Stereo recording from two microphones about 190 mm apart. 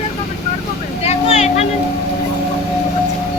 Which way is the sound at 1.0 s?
35° left (ahead or behind).